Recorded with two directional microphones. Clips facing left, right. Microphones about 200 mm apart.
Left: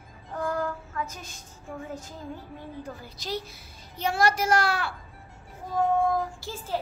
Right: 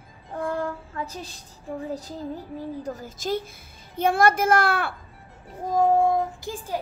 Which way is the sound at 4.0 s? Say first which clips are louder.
Right 5 dB; 55° right (ahead or behind).